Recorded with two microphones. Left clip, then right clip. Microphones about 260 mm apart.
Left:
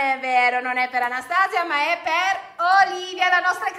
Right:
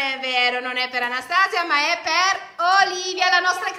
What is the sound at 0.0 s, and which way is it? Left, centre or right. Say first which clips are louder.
A woman's voice: left 2 dB; centre.